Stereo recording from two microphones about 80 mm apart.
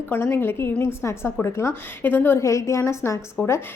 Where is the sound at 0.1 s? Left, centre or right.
Left.